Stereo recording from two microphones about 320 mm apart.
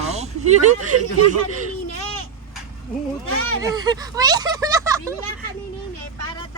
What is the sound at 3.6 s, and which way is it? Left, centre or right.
Speech, centre.